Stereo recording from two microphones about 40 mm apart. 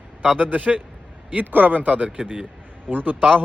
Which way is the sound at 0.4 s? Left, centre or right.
Right.